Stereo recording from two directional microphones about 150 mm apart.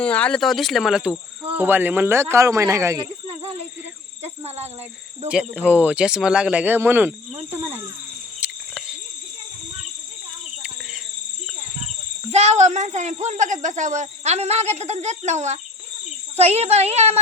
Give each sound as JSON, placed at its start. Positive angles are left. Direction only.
{"t": 0.0, "sound": "speech", "side_deg": 10}
{"t": 4.2, "sound": "a sound", "side_deg": -45}
{"t": 5.3, "sound": "speech", "side_deg": -5}
{"t": 8.4, "sound": "cricket", "side_deg": -10}
{"t": 12.3, "sound": "speech", "side_deg": -45}